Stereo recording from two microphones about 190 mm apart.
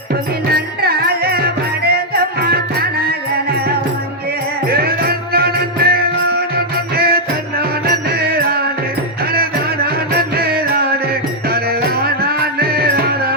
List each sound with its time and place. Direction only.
0.5 s music: 55° right (ahead or behind)
4.6 s music: 55° right (ahead or behind)